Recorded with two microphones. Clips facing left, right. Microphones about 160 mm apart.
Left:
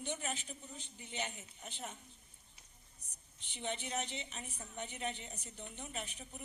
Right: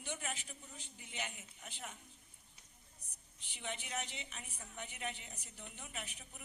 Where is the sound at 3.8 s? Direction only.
30° left (ahead or behind).